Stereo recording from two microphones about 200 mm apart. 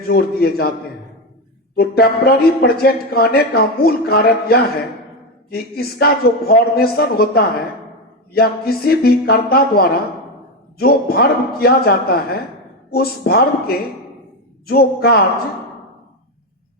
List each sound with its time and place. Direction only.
0.1 s a man's voice: 50° left (ahead or behind)
1.7 s a man's voice: 50° left (ahead or behind)